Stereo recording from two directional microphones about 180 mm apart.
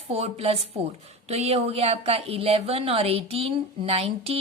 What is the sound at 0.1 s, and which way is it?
A woman's voice, 35° right (ahead or behind).